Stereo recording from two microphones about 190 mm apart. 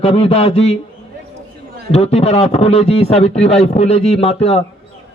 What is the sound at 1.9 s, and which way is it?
A man's voice, 30° left (ahead or behind).